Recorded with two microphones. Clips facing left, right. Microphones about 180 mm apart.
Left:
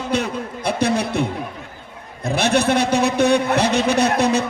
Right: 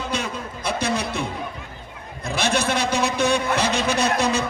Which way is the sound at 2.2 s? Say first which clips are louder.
Left 5 dB; 60° left (ahead or behind).